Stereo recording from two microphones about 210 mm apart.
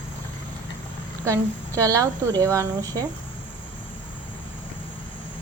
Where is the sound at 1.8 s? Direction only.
15° right (ahead or behind).